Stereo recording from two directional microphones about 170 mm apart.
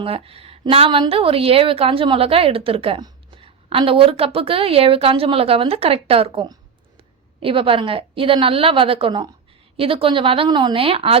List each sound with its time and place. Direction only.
0.0 s speech: 35° right (ahead or behind)